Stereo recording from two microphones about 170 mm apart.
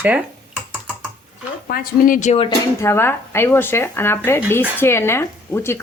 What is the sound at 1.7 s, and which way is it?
Speech, 55° left (ahead or behind).